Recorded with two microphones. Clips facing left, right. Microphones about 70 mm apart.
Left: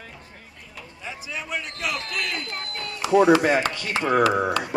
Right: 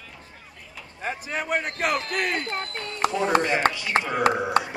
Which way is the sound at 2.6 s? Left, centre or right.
Centre.